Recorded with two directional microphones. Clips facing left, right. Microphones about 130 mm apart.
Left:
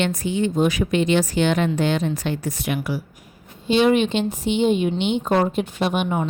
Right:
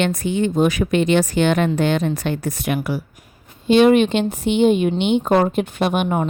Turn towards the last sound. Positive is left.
turn(degrees=-55)  # may be behind; listen again after turning